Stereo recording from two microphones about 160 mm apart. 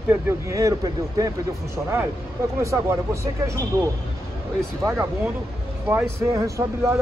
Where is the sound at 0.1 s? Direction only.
20° right (ahead or behind).